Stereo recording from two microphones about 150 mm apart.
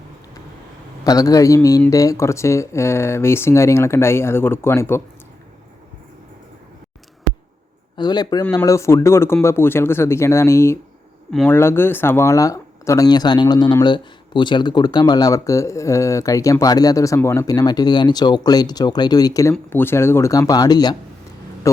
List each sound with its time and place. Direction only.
1.0 s speech: 25° left (ahead or behind)
7.9 s speech: 25° left (ahead or behind)